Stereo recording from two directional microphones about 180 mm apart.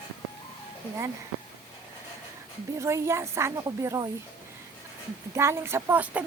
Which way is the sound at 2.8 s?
15° right (ahead or behind).